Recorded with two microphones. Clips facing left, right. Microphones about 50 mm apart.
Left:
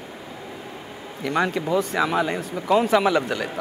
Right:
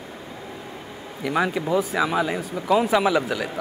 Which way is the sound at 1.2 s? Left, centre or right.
Centre.